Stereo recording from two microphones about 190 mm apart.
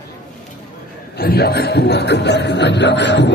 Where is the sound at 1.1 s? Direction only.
55° left (ahead or behind).